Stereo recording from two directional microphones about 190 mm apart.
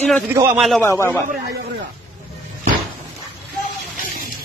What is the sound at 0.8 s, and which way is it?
Speech, 15° left (ahead or behind).